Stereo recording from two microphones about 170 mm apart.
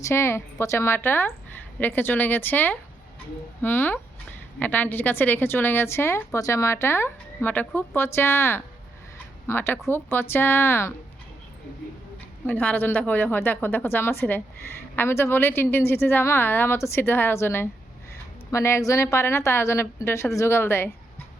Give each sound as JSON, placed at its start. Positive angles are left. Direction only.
{"t": 0.0, "sound": "a woman's voice", "side_deg": 15}
{"t": 12.5, "sound": "a woman's voice", "side_deg": 10}